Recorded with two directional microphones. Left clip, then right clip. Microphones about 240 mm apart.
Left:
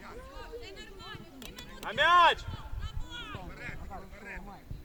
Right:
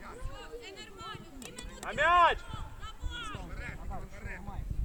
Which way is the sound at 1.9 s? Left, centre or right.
Left.